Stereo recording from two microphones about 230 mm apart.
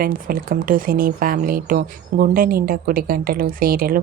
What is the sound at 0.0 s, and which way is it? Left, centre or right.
Speech, right.